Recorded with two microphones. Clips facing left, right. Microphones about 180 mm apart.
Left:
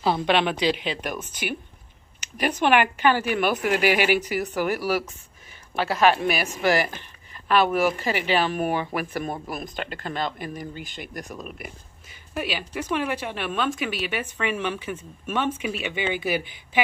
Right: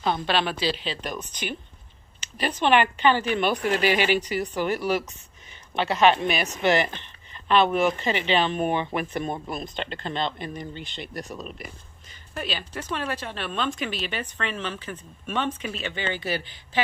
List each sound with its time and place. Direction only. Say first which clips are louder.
0.2 s speech: left 3 dB; 20° left (ahead or behind)
6.6 s speech: even; 25° right (ahead or behind)
7.6 s speech: even; 5° left (ahead or behind)
8.7 s speech: even; 25° right (ahead or behind)
11.2 s speech: even; centre (ahead or behind)